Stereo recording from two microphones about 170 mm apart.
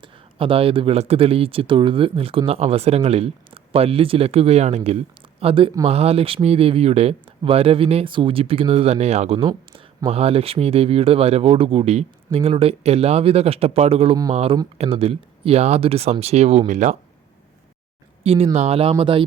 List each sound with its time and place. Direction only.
0.0 s speech: 30° right (ahead or behind)
18.2 s a sound: 35° right (ahead or behind)
18.5 s speech: 35° right (ahead or behind)